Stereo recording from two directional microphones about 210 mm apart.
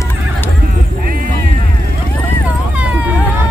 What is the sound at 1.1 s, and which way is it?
Music, 40° right (ahead or behind).